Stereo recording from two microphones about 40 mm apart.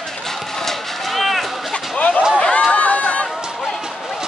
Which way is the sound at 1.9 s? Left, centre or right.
Left.